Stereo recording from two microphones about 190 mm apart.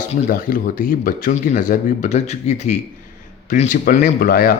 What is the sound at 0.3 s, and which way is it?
Speech, 50° left (ahead or behind).